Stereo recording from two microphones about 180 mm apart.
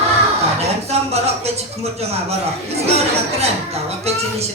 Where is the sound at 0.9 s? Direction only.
35° right (ahead or behind).